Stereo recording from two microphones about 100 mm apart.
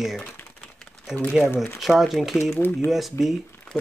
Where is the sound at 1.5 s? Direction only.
25° left (ahead or behind).